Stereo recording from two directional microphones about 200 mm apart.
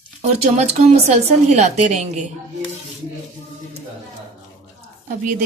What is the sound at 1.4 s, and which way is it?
Speech, 35° right (ahead or behind).